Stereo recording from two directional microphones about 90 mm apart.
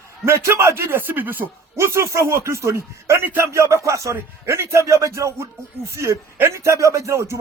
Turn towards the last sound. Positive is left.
turn(degrees=-30)  # may be behind; listen again after turning